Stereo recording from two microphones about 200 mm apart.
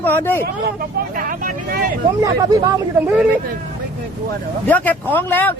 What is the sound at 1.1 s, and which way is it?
Vehicle, 45° right (ahead or behind).